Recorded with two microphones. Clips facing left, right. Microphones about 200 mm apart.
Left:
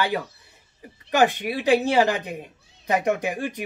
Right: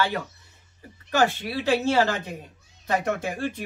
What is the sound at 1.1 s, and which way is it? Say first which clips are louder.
A man's voice: left 3 dB; 15° left (ahead or behind).